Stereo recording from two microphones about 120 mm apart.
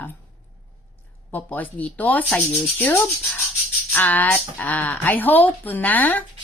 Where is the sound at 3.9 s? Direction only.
15° left (ahead or behind).